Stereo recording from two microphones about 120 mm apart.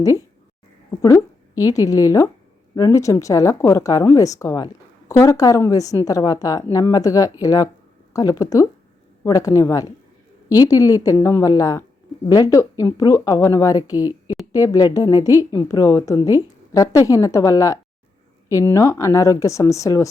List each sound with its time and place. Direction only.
0.9 s a woman's voice: 25° left (ahead or behind)